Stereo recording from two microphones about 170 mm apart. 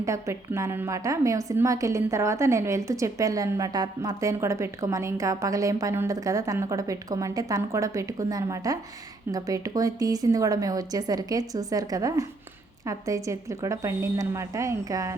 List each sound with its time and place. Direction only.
0.0 s a woman's voice: 15° right (ahead or behind)